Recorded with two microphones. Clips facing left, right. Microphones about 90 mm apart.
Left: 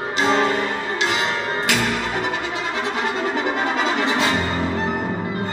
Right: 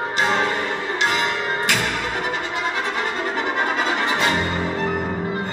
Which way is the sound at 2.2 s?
45° right (ahead or behind).